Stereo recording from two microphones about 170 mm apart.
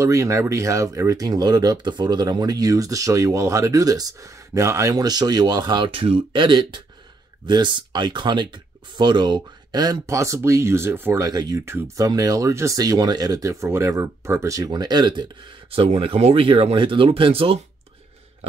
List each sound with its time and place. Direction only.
0.0 s speech: 20° right (ahead or behind); by 17.6 s 35° right (ahead or behind)